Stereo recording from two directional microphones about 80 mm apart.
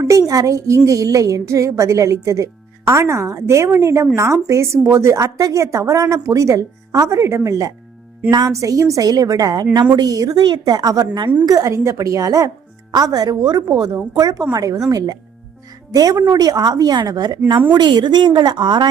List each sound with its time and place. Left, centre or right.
0.0 s a woman's voice: right
8.3 s a woman's voice: right
10.4 s speech: right
11.4 s a woman's voice: right
17.7 s a woman's voice: right